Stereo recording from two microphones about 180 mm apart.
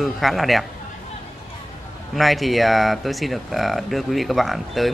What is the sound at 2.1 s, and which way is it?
Speech, centre (ahead or behind).